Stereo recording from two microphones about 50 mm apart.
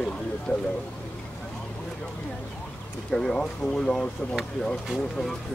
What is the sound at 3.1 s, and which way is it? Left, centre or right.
Speech, centre.